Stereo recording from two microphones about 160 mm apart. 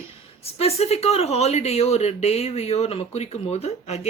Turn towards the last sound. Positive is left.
turn(degrees=45)  # may be behind; listen again after turning